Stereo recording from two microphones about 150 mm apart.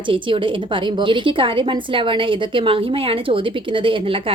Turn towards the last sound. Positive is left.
turn(degrees=-35)  # may be behind; listen again after turning